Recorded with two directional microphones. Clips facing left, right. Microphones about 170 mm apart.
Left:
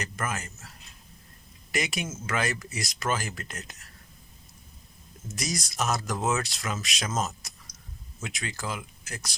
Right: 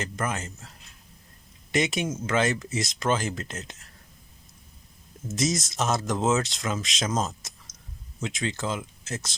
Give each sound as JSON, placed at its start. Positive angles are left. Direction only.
{"t": 0.0, "sound": "speech", "side_deg": -20}
{"t": 1.7, "sound": "speech", "side_deg": -25}
{"t": 5.3, "sound": "speech", "side_deg": -20}